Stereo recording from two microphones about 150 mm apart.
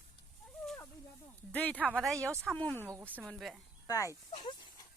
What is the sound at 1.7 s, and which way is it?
Speech, 10° right (ahead or behind).